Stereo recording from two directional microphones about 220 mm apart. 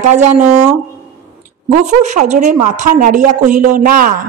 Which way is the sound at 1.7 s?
35° right (ahead or behind).